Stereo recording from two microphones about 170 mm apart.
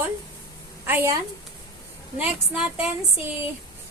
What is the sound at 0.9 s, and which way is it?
A woman's voice, 15° right (ahead or behind).